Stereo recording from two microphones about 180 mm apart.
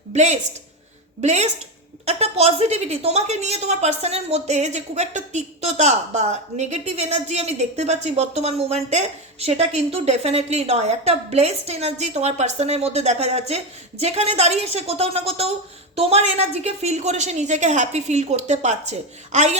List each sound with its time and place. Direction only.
0.1 s a woman's voice: 40° right (ahead or behind)